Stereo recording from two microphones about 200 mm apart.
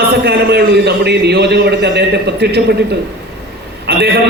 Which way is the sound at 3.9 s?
50° right (ahead or behind).